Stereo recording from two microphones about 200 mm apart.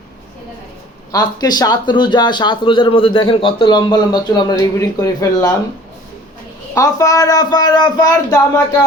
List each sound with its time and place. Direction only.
1.1 s speech: 20° left (ahead or behind)
6.7 s speech: 15° left (ahead or behind)